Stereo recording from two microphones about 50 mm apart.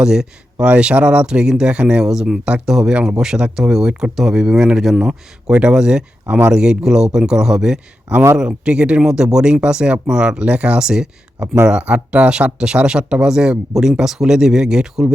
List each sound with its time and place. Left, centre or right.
0.0 s speech: centre